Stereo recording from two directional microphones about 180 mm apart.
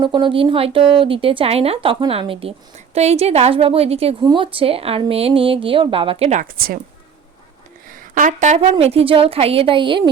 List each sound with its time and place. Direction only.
0.0 s speech: 25° right (ahead or behind)
6.4 s a woman's voice: 55° right (ahead or behind)
7.9 s speech: 50° right (ahead or behind); by 10.0 s 25° right (ahead or behind)